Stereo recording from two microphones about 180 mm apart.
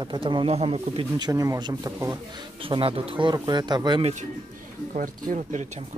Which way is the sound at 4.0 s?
35° right (ahead or behind).